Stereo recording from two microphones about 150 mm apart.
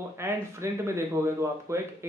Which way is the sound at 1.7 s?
20° right (ahead or behind).